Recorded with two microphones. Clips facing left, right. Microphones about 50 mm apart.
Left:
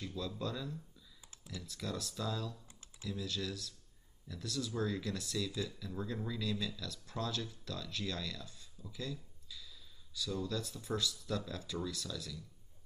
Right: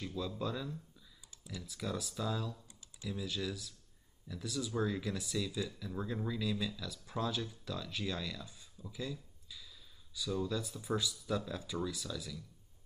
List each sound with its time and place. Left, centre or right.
0.0 s speech: centre